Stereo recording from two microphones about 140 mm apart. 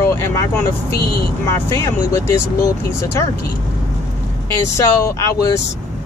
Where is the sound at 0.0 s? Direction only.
20° left (ahead or behind).